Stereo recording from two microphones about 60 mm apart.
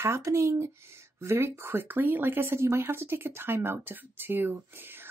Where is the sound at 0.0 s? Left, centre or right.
Right.